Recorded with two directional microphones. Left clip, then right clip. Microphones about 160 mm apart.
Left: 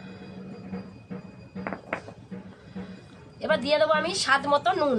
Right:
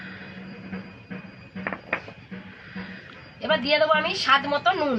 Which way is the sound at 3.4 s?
30° left (ahead or behind).